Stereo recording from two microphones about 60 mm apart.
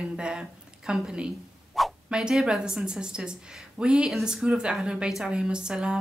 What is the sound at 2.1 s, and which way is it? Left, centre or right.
Speech, centre.